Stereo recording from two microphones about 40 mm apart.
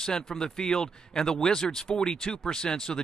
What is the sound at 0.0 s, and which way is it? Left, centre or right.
Speech, centre.